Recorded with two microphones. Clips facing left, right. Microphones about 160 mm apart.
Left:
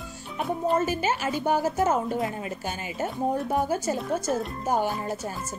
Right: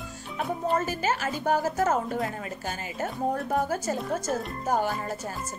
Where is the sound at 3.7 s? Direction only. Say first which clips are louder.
Left 2 dB; 5° left (ahead or behind).